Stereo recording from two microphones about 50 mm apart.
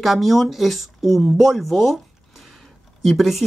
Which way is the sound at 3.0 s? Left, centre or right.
Centre.